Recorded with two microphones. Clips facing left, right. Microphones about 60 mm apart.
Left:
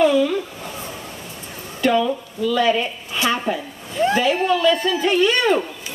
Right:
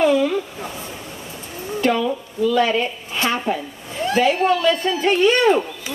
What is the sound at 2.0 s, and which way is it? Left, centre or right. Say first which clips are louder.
Speech: left 1 dB; right.